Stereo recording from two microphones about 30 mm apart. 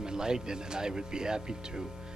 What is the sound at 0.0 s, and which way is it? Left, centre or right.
Speech, right.